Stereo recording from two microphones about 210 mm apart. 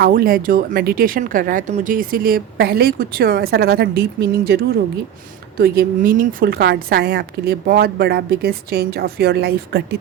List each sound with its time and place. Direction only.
0.0 s speech: 45° right (ahead or behind)